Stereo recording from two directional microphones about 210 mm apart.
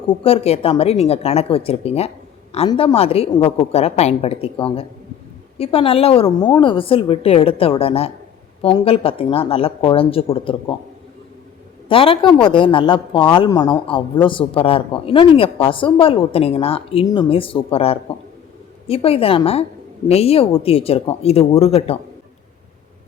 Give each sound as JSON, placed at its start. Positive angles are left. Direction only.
{"t": 0.1, "sound": "speech", "side_deg": 25}
{"t": 11.9, "sound": "speech", "side_deg": 25}
{"t": 13.6, "sound": "a man's voice", "side_deg": 15}
{"t": 14.3, "sound": "speech", "side_deg": 25}